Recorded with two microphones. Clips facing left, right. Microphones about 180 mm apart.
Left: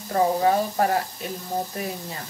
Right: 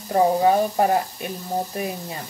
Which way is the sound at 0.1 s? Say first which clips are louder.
Right 3 dB; 20° right (ahead or behind).